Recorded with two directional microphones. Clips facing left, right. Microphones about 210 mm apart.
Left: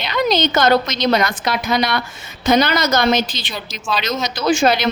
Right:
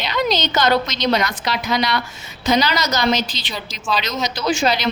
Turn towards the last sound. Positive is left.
turn(degrees=50)  # may be behind; listen again after turning